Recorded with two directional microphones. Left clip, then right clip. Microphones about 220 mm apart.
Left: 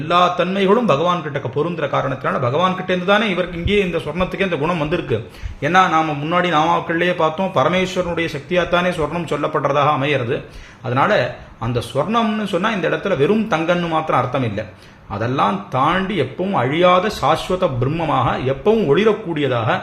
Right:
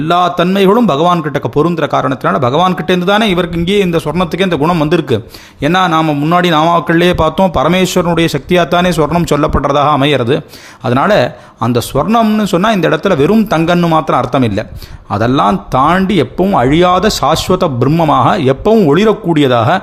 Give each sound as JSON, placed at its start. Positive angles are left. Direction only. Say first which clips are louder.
{"t": 0.1, "sound": "a man's voice", "louder": "right 4 dB", "side_deg": -55}